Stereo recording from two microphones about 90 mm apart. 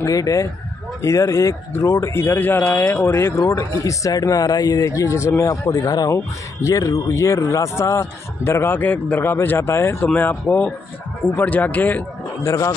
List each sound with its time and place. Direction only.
0.0 s speech: 40° left (ahead or behind)
3.3 s speech: 35° left (ahead or behind); by 12.0 s 20° left (ahead or behind)
12.4 s speech: 35° left (ahead or behind)